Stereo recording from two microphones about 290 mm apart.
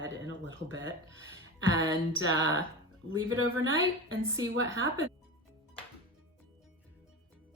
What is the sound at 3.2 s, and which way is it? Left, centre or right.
Speech, right.